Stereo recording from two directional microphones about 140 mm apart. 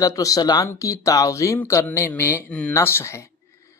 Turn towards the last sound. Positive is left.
turn(degrees=20)  # may be behind; listen again after turning